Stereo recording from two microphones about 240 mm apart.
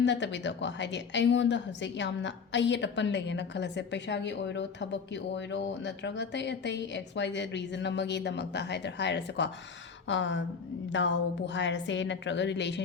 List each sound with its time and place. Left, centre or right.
0.0 s a woman's voice: left